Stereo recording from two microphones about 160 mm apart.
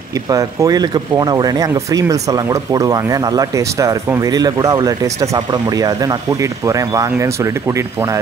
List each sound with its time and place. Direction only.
0.3 s speech: 20° right (ahead or behind)